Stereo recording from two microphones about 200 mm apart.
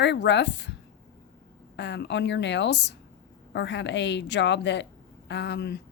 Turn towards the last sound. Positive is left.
turn(degrees=60)  # may be behind; listen again after turning